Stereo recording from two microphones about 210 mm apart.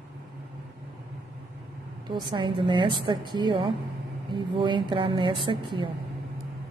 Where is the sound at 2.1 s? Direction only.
20° right (ahead or behind).